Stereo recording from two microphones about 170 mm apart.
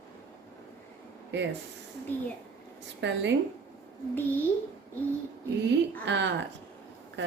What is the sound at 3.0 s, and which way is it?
Speech, 90° right.